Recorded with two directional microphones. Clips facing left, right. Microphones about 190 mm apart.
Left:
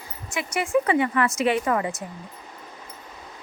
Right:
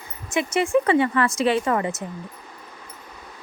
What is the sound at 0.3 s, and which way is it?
Speech, 25° right (ahead or behind).